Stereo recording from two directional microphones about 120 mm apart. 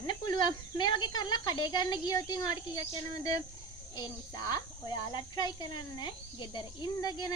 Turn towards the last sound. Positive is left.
turn(degrees=35)  # may be behind; listen again after turning